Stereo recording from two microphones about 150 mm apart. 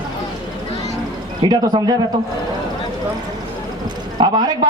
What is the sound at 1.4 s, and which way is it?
Speech, 30° right (ahead or behind).